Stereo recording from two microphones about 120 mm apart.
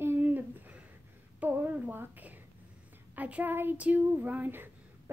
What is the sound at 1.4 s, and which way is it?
A woman's voice, 15° right (ahead or behind).